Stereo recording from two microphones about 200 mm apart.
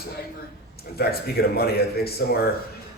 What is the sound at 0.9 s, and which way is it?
A man's voice, 50° left (ahead or behind).